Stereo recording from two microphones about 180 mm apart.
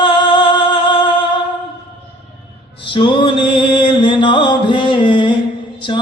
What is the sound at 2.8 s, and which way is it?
Music, 25° left (ahead or behind).